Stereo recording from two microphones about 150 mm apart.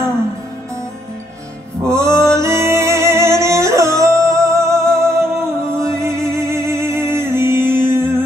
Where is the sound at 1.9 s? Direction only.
20° right (ahead or behind).